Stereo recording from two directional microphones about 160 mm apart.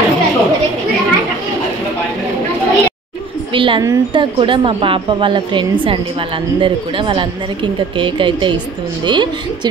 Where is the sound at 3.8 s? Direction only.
25° right (ahead or behind).